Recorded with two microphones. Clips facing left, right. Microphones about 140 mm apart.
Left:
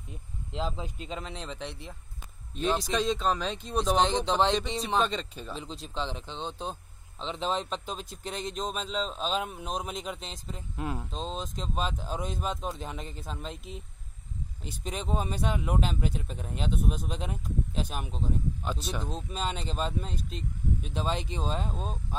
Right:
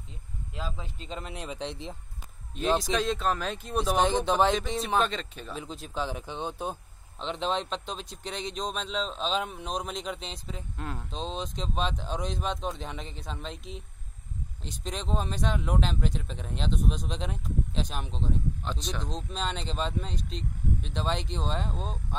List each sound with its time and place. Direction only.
0.5 s speech: 20° left (ahead or behind)
1.0 s speech: centre (ahead or behind)
1.3 s speech: 10° right (ahead or behind)
2.8 s speech: centre (ahead or behind)
10.8 s speech: 10° left (ahead or behind)
11.1 s speech: centre (ahead or behind)